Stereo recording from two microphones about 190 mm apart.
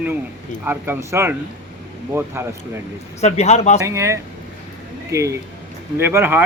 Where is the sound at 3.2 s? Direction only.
35° left (ahead or behind).